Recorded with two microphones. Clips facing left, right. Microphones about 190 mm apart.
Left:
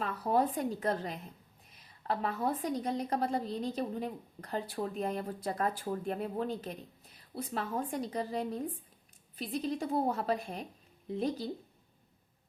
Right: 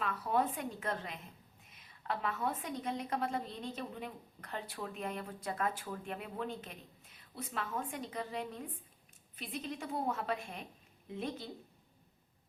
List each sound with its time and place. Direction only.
0.0 s a woman's voice: 35° left (ahead or behind)